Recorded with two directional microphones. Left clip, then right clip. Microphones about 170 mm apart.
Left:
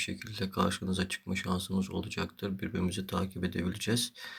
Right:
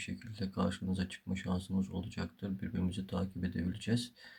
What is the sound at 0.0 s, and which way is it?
Speech, 25° right (ahead or behind).